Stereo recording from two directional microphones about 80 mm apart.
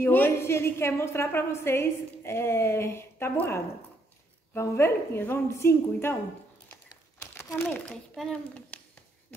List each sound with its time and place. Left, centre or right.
0.0 s a woman's voice: left
8.2 s a child's voice: centre
8.5 s a sound: centre